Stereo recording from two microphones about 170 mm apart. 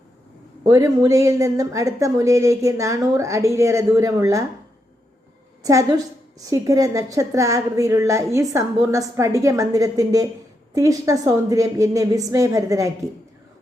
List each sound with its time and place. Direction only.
0.6 s a woman's voice: 20° right (ahead or behind)
5.6 s a woman's voice: 20° right (ahead or behind)